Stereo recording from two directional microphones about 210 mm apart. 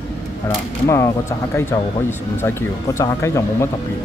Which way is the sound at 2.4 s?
15° left (ahead or behind).